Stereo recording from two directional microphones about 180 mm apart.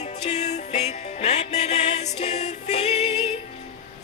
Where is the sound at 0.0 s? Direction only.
40° left (ahead or behind).